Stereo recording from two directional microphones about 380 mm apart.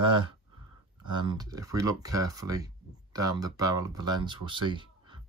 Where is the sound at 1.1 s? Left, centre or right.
Centre.